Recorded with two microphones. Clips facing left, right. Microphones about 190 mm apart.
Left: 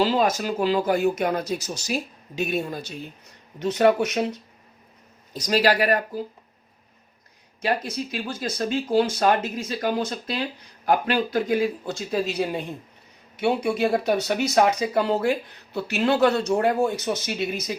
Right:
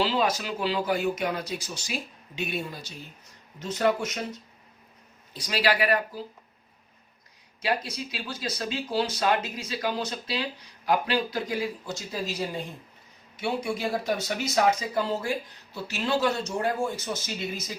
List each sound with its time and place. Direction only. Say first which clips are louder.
0.0 s speech: left 4 dB; 45° left (ahead or behind)
3.6 s speech: left 6 dB; 65° left (ahead or behind)
5.3 s speech: left 5 dB; 45° left (ahead or behind)
7.6 s speech: left 4 dB; 50° left (ahead or behind); by 17.3 s 65° left (ahead or behind)